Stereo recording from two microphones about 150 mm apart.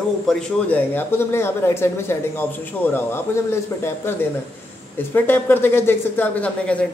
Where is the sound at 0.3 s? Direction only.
10° left (ahead or behind).